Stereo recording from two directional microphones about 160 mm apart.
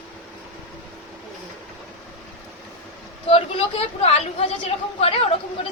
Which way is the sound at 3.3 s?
40° left (ahead or behind).